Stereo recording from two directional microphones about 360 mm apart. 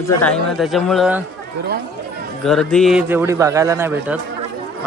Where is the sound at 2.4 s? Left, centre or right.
Centre.